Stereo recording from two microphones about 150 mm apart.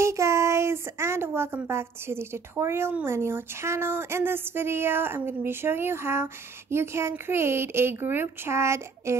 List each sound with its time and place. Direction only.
0.0 s speech: 20° right (ahead or behind)